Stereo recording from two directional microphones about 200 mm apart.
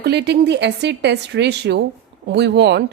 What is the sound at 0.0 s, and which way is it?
A woman's voice, 60° right (ahead or behind).